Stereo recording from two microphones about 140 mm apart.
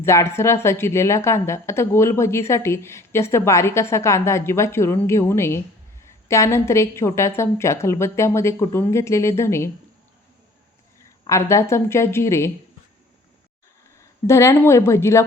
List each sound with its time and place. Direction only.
0.0 s a woman's voice: 20° left (ahead or behind)
11.3 s a woman's voice: 20° left (ahead or behind)
14.0 s a woman's voice: 20° left (ahead or behind)